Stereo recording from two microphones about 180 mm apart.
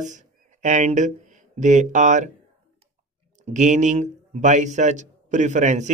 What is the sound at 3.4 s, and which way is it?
A man's voice, 40° right (ahead or behind).